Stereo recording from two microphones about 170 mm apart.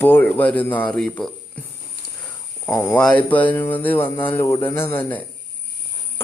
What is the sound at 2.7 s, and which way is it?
A man's voice, 15° left (ahead or behind).